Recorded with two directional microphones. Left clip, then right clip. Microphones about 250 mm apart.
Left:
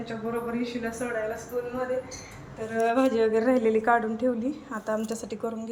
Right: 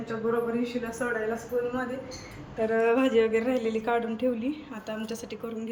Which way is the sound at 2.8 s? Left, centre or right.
Centre.